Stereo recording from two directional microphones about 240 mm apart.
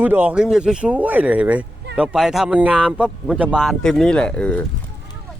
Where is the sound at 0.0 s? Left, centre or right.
Centre.